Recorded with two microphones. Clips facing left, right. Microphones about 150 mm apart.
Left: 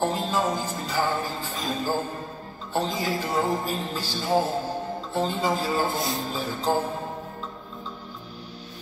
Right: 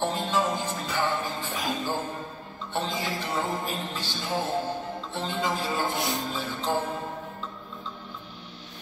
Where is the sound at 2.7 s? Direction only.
40° left (ahead or behind).